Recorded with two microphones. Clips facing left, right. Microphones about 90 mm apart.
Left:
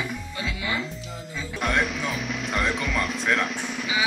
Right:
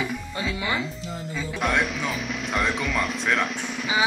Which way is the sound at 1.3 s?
Centre (ahead or behind).